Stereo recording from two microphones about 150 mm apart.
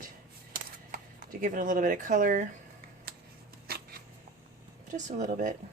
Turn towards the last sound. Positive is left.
turn(degrees=-55)  # may be behind; listen again after turning